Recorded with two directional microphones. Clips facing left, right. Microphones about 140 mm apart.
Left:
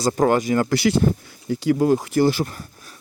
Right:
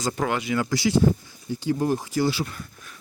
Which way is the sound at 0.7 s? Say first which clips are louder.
Left 5 dB; 65° left (ahead or behind).